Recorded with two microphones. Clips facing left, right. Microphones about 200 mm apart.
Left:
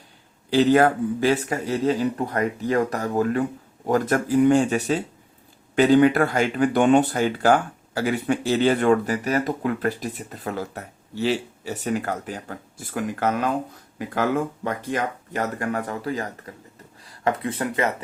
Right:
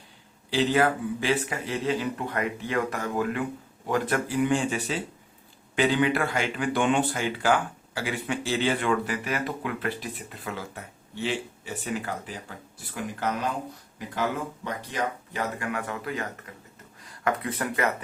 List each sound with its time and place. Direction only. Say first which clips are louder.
0.5 s speech: left 6 dB; 45° left (ahead or behind); by 17.9 s 25° left (ahead or behind)